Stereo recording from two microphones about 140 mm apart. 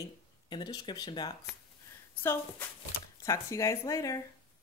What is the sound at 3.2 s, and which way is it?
Speech, 20° left (ahead or behind).